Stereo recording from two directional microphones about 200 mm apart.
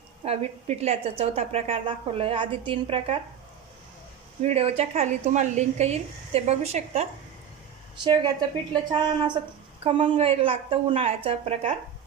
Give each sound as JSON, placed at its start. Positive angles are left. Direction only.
{"t": 0.3, "sound": "a woman's voice", "side_deg": -30}
{"t": 4.4, "sound": "a woman's voice", "side_deg": -30}